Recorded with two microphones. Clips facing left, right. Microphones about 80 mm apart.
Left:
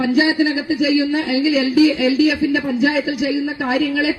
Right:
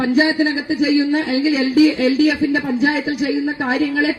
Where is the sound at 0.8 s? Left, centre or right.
Right.